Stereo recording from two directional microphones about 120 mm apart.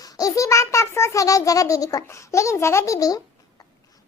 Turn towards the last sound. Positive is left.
turn(degrees=30)  # may be behind; listen again after turning